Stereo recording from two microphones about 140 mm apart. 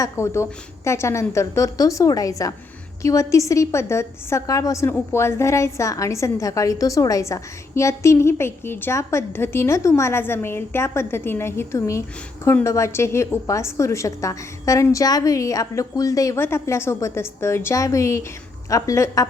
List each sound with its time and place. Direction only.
0.0 s a woman's voice: 20° left (ahead or behind)